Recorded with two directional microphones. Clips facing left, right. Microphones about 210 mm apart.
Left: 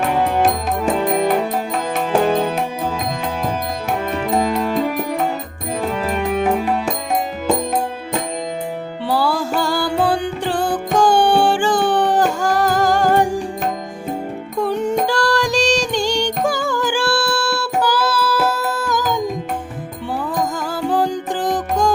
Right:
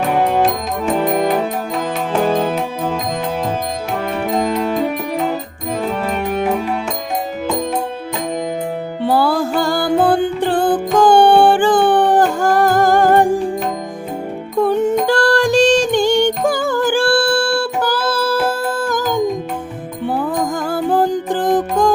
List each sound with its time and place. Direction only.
9.0 s music: 55° right (ahead or behind)
14.6 s music: 50° right (ahead or behind)
20.7 s music: 55° right (ahead or behind)